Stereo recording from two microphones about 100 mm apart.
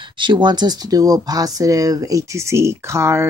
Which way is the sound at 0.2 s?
50° right (ahead or behind).